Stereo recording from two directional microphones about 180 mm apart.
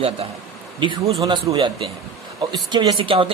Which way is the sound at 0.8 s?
30° right (ahead or behind).